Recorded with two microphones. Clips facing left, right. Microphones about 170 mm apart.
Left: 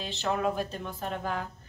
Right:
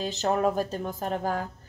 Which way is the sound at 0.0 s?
40° right (ahead or behind).